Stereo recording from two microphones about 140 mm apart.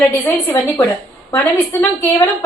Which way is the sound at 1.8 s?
25° left (ahead or behind).